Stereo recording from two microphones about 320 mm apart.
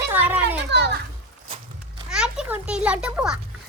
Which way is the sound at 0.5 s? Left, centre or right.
Right.